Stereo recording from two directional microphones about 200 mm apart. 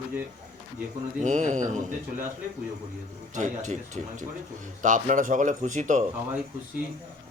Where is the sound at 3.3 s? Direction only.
35° right (ahead or behind).